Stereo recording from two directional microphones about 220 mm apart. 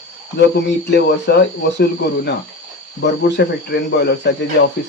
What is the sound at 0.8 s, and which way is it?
Speech, 50° left (ahead or behind).